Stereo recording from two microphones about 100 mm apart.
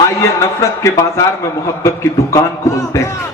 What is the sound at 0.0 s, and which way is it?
A man's voice, 30° left (ahead or behind).